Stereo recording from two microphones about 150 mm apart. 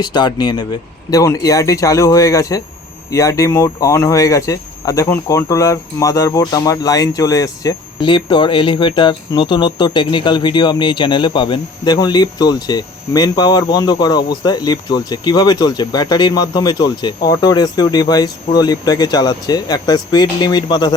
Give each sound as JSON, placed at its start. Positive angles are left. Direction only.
{"t": 0.0, "sound": "speech", "side_deg": 30}